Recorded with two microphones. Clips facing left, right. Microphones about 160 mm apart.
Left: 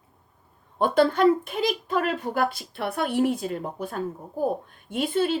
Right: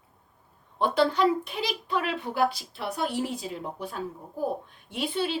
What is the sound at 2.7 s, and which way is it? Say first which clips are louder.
A woman's voice: left 6 dB; 55° left (ahead or behind).